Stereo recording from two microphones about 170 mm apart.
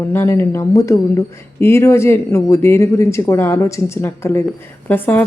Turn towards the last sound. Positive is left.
turn(degrees=10)  # may be behind; listen again after turning